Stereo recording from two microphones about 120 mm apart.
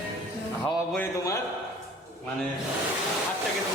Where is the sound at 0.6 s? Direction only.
20° left (ahead or behind).